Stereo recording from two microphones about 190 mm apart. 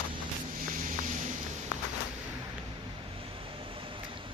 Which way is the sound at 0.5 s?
45° right (ahead or behind).